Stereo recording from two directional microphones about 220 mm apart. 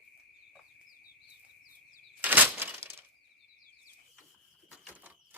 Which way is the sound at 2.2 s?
10° right (ahead or behind).